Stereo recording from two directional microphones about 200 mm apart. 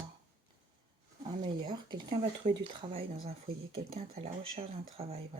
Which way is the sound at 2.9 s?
30° right (ahead or behind).